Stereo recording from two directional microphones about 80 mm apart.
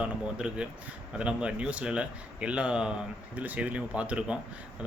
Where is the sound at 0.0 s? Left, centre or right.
Centre.